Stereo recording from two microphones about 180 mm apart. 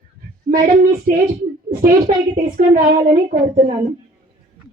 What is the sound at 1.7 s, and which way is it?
A woman's voice, 55° right (ahead or behind).